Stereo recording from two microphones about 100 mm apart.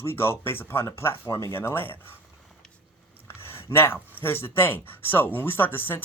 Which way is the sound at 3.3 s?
25° left (ahead or behind).